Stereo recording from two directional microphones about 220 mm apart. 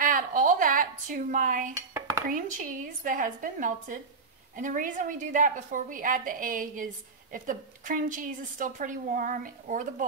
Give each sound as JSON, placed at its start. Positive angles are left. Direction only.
{"t": 0.0, "sound": "a sound", "side_deg": -40}
{"t": 2.0, "sound": "dishes", "side_deg": -15}
{"t": 2.2, "sound": "a woman's voice", "side_deg": -35}